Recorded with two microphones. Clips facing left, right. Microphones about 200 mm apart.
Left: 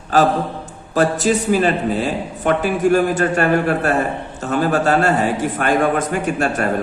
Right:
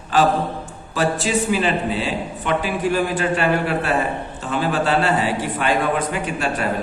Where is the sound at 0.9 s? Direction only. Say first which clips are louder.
Left 4 dB; 45° left (ahead or behind).